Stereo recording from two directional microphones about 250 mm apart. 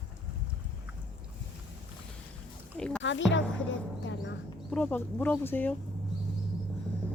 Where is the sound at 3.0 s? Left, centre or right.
Left.